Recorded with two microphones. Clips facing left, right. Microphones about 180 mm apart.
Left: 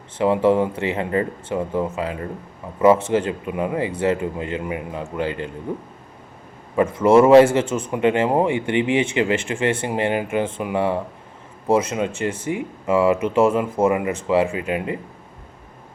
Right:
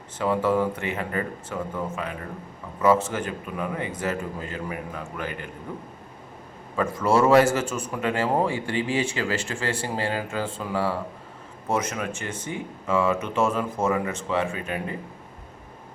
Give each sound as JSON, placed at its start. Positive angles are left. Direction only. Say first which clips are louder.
{"t": 0.2, "sound": "speech", "louder": "left 6 dB", "side_deg": 25}
{"t": 6.7, "sound": "speech", "louder": "left 7 dB", "side_deg": 20}